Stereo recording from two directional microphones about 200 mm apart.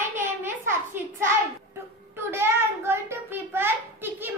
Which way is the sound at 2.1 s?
10° right (ahead or behind).